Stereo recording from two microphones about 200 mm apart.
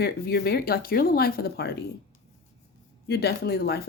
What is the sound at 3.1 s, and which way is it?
Speech, 55° left (ahead or behind).